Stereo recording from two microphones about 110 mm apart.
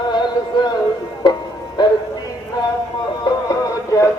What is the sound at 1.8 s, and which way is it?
Music, 40° left (ahead or behind).